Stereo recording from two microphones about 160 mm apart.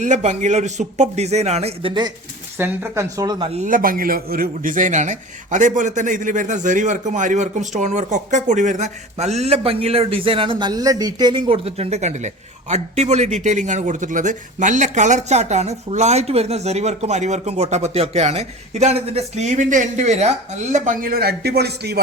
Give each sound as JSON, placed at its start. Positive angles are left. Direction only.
{"t": 0.0, "sound": "a man's voice", "side_deg": -50}
{"t": 2.6, "sound": "speech", "side_deg": -15}
{"t": 3.6, "sound": "a man's voice", "side_deg": -60}